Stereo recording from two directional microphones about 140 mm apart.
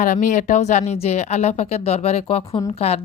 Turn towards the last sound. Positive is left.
turn(degrees=50)  # may be behind; listen again after turning